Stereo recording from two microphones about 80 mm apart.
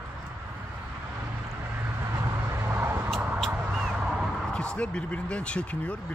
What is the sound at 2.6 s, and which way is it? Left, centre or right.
Vehicle, right.